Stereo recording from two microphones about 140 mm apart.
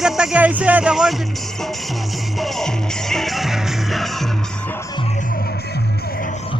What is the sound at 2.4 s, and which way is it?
Music, centre (ahead or behind).